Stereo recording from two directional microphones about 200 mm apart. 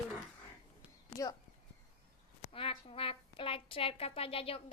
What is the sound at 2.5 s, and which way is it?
A woman's voice, 25° left (ahead or behind).